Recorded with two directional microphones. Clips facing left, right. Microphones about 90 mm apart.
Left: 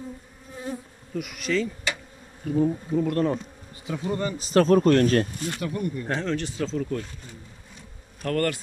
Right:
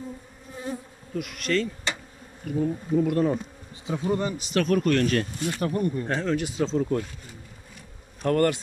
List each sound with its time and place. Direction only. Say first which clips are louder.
1.1 s bee: even; centre (ahead or behind)
2.4 s bee: left 3 dB; 20° left (ahead or behind)
3.0 s bee: right 1 dB; 5° right (ahead or behind)
3.8 s speech: right 2 dB; 20° right (ahead or behind)
4.4 s speech: left 5 dB; 35° left (ahead or behind)
5.6 s speech: right 4 dB; 35° right (ahead or behind)
6.0 s speech: right 1 dB; centre (ahead or behind)
6.6 s bee: right 6 dB; 25° right (ahead or behind)
8.2 s bee: right 3 dB; 20° right (ahead or behind)